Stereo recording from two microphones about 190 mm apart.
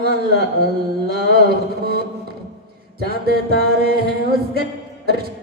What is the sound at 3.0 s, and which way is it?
Music, 55° right (ahead or behind).